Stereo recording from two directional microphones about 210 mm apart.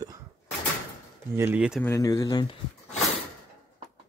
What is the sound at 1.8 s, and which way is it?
Speech, 15° left (ahead or behind).